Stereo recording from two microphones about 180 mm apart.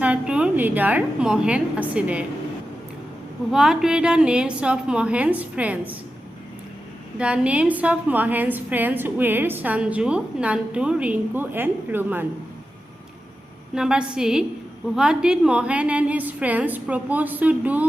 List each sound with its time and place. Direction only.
0.0 s a woman's voice: 5° right (ahead or behind)
3.5 s a woman's voice: 5° right (ahead or behind)
7.2 s a woman's voice: 5° right (ahead or behind)
13.7 s a woman's voice: 5° right (ahead or behind)